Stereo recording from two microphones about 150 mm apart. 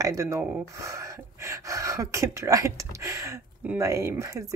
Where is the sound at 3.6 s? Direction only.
10° right (ahead or behind).